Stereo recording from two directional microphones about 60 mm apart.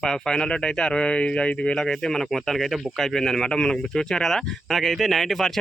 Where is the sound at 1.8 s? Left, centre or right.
Centre.